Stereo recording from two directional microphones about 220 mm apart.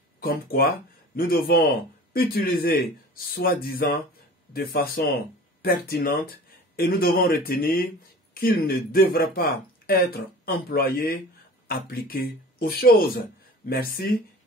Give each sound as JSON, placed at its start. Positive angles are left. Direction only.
{"t": 0.2, "sound": "speech", "side_deg": 45}